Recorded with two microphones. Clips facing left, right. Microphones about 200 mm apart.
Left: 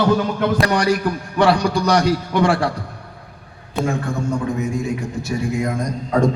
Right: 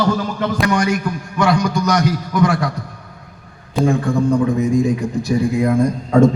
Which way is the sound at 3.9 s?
35° right (ahead or behind).